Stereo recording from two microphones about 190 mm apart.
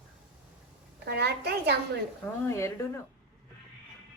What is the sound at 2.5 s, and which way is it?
Speech, 15° left (ahead or behind).